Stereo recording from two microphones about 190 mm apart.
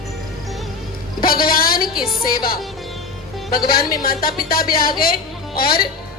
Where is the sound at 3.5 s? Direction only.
50° left (ahead or behind).